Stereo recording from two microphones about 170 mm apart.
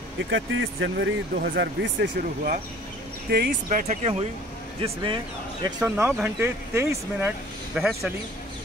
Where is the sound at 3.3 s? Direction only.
60° right (ahead or behind); by 5.7 s 30° right (ahead or behind).